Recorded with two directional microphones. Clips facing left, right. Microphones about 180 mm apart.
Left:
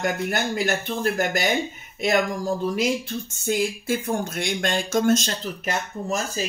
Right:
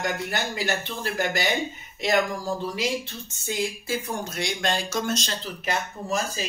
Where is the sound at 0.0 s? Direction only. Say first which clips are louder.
Left 4 dB; 50° left (ahead or behind).